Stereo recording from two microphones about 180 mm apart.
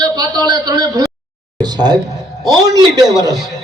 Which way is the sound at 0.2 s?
20° right (ahead or behind).